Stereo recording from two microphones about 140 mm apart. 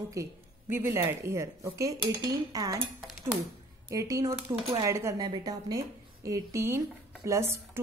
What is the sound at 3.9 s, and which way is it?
A woman's voice, 25° right (ahead or behind).